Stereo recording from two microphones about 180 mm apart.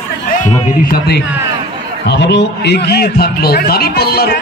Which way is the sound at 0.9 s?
65° left (ahead or behind).